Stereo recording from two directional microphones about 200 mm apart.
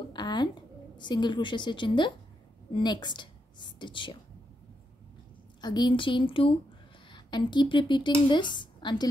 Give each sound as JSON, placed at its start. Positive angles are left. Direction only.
{"t": 0.1, "sound": "a sound", "side_deg": 20}
{"t": 0.9, "sound": "a woman's voice", "side_deg": 20}
{"t": 5.6, "sound": "a woman's voice", "side_deg": 20}